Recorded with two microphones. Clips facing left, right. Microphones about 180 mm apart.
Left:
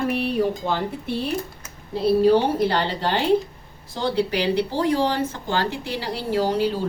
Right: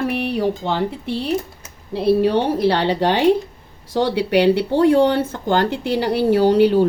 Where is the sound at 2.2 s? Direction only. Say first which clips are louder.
Right 1 dB; 70° right (ahead or behind).